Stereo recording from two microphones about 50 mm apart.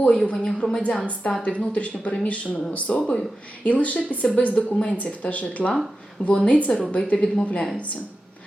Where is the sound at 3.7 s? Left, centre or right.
Left.